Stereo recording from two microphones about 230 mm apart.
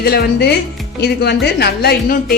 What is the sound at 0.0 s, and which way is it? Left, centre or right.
A woman's voice, left.